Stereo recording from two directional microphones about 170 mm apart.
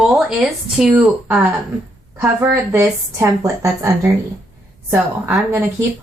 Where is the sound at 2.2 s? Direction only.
15° right (ahead or behind).